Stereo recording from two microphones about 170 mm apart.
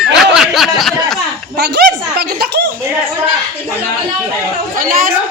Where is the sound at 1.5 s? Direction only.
80° right.